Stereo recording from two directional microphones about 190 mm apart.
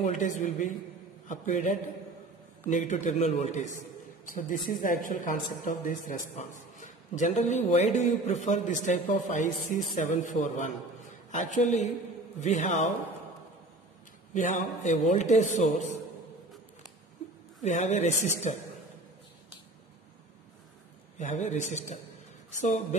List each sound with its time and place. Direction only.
0.0 s a woman's voice: 40° left (ahead or behind)
14.3 s a woman's voice: 40° left (ahead or behind)
17.6 s a woman's voice: 35° left (ahead or behind)
21.2 s a woman's voice: 40° left (ahead or behind)